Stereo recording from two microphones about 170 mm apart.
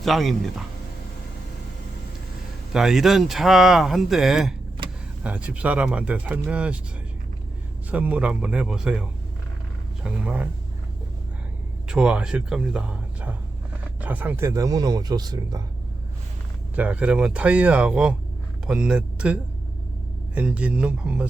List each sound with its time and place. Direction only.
0.0 s speech: centre (ahead or behind)
2.7 s speech: centre (ahead or behind)
7.9 s speech: 10° right (ahead or behind)
11.9 s speech: 5° right (ahead or behind); by 15.6 s 25° right (ahead or behind)
16.7 s speech: 10° right (ahead or behind)